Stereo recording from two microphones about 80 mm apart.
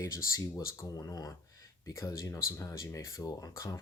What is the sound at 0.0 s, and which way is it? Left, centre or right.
Speech, left.